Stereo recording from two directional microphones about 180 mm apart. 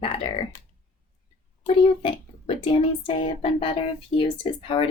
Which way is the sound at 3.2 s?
30° left (ahead or behind).